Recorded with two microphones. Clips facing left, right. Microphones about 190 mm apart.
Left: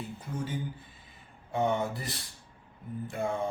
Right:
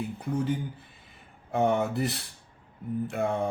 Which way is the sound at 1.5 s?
65° right (ahead or behind).